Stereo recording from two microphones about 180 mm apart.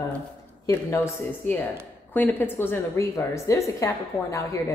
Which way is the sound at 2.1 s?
10° left (ahead or behind).